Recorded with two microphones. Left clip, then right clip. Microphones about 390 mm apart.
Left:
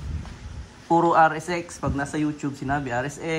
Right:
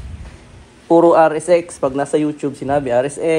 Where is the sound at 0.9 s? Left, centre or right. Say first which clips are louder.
Right 7 dB; centre.